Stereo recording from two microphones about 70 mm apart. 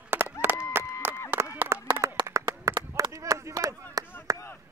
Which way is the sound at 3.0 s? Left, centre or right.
Right.